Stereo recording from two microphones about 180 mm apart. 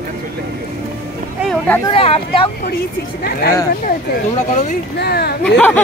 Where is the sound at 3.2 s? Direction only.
55° left (ahead or behind).